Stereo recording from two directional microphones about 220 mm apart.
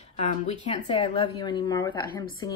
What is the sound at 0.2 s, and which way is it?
Speech, 30° left (ahead or behind).